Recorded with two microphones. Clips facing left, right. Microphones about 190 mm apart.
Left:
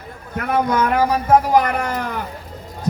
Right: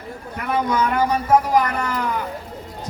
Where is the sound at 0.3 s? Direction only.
55° left (ahead or behind).